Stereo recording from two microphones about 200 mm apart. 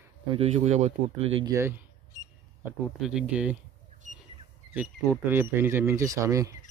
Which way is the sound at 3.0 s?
5° right (ahead or behind).